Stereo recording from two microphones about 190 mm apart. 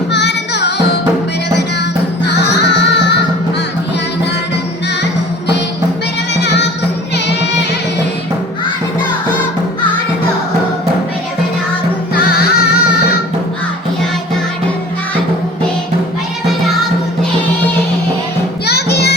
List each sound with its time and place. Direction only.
0.1 s music: 65° left (ahead or behind)
2.2 s music: 65° left (ahead or behind)
6.3 s music: 65° left (ahead or behind)
12.3 s music: 55° left (ahead or behind)
18.6 s music: 60° left (ahead or behind)